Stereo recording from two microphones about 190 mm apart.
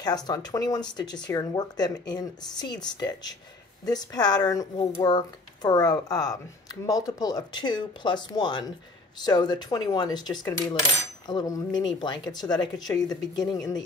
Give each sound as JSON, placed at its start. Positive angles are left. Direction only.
{"t": 0.0, "sound": "speech", "side_deg": 20}